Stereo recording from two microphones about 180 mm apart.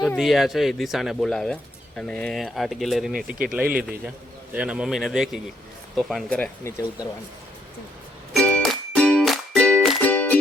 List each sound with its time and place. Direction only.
0.2 s speech: centre (ahead or behind)
6.7 s speech: 15° left (ahead or behind)
8.3 s music: 5° left (ahead or behind)